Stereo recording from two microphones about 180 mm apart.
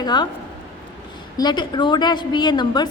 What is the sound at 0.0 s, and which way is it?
Speech, 25° left (ahead or behind).